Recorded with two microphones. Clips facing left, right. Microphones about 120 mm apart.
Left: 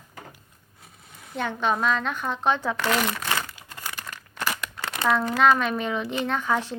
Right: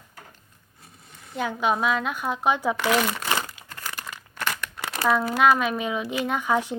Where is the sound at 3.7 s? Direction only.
15° left (ahead or behind).